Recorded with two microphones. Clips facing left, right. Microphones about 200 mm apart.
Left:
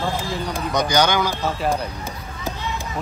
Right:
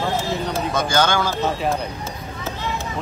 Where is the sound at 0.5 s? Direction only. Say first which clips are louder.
Left 2 dB; 15° left (ahead or behind).